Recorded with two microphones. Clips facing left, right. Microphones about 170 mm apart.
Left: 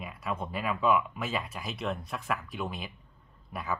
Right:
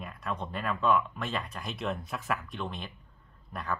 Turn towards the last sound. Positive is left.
turn(degrees=5)  # may be behind; listen again after turning